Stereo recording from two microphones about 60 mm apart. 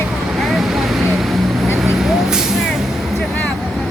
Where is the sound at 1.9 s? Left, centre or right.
Centre.